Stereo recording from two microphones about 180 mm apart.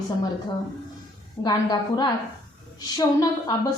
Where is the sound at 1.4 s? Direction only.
25° left (ahead or behind).